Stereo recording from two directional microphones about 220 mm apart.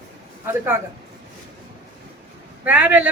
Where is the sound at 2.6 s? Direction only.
5° right (ahead or behind).